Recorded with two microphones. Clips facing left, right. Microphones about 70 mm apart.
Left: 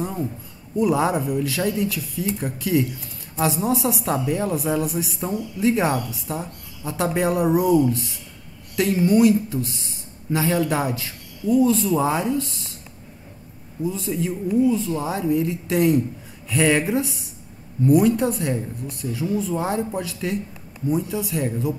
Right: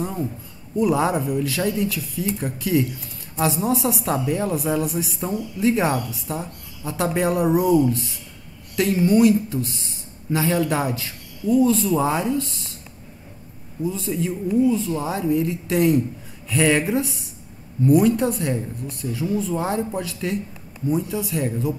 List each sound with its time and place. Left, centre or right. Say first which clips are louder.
0.0 s a sound: even; centre
0.7 s a woman's voice: even; centre
13.8 s a woman's voice: even; centre